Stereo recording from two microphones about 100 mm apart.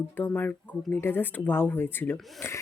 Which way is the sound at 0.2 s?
20° left (ahead or behind).